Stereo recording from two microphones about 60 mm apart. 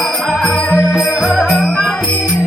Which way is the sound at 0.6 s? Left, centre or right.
Centre.